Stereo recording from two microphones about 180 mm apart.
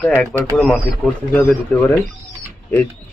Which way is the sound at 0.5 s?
5° right (ahead or behind).